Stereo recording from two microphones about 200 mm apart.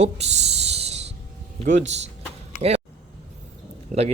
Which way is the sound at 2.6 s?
30° right (ahead or behind).